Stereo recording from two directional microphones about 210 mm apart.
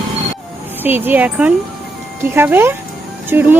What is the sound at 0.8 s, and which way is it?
Speech, 10° right (ahead or behind).